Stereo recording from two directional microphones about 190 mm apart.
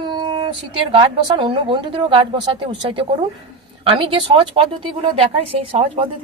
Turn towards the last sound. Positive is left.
turn(degrees=-30)  # may be behind; listen again after turning